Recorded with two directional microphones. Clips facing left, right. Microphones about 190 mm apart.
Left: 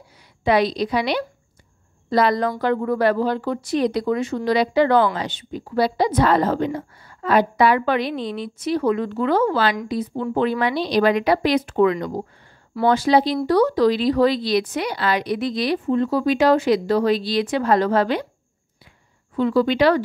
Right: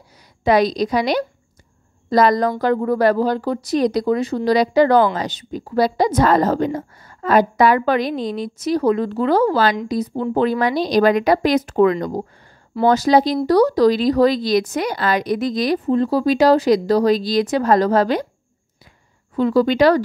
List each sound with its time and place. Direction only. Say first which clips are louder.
0.4 s speech: right 3 dB; 40° right (ahead or behind)
19.3 s speech: right 2 dB; 40° right (ahead or behind)